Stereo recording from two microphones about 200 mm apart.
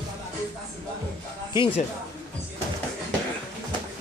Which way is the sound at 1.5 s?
25° left (ahead or behind).